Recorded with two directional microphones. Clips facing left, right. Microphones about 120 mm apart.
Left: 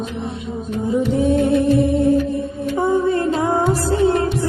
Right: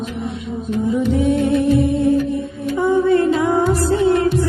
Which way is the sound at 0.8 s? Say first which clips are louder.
Even; 35° left (ahead or behind).